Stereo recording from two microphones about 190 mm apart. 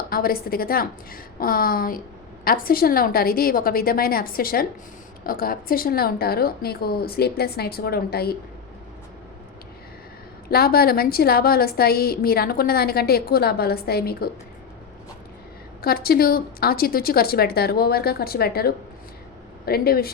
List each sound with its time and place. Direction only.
0.1 s a woman's voice: 50° left (ahead or behind)
10.5 s a woman's voice: 55° left (ahead or behind)
15.8 s a woman's voice: 50° left (ahead or behind)